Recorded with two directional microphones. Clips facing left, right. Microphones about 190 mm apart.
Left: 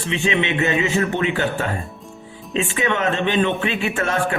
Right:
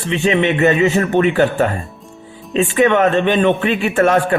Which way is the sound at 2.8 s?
50° right (ahead or behind).